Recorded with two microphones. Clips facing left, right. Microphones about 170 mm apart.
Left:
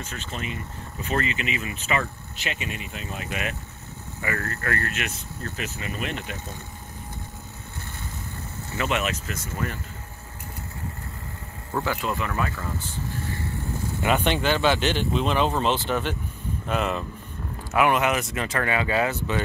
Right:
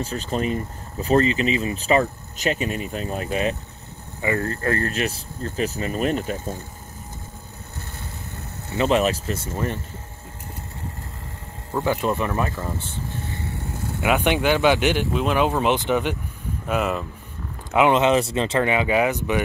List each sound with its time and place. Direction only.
0.0 s speech: 35° right (ahead or behind)
4.2 s speech: 20° right (ahead or behind); by 6.5 s 40° right (ahead or behind)
8.7 s speech: 35° right (ahead or behind)
11.8 s speech: 25° right (ahead or behind)
14.0 s speech: 10° right (ahead or behind)
17.7 s speech: 20° right (ahead or behind)